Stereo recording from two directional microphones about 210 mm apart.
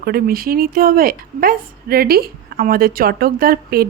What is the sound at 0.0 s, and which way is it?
A woman's voice, 45° right (ahead or behind).